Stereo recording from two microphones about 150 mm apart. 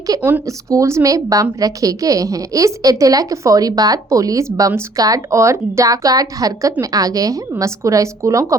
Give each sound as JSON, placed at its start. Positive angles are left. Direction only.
{"t": 0.2, "sound": "speech", "side_deg": -15}